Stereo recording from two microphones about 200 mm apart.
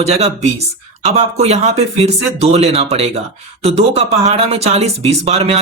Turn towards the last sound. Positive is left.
turn(degrees=-30)  # may be behind; listen again after turning